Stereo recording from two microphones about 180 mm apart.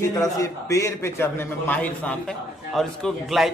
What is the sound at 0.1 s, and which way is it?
A man's voice, 20° left (ahead or behind).